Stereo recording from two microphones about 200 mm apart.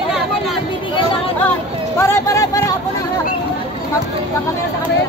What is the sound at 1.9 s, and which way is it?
Speech, 15° left (ahead or behind).